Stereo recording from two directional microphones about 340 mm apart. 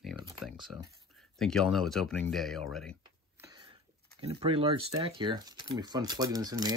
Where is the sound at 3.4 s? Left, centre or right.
Centre.